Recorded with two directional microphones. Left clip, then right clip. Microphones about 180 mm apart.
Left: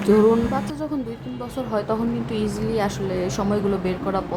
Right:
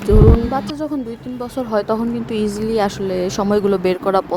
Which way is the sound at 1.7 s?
35° right (ahead or behind).